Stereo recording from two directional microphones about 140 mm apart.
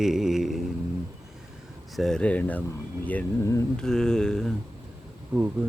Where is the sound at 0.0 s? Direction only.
5° right (ahead or behind).